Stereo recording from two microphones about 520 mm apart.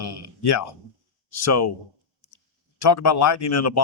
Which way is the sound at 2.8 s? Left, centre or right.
Left.